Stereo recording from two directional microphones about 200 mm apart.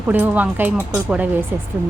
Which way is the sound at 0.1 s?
10° right (ahead or behind).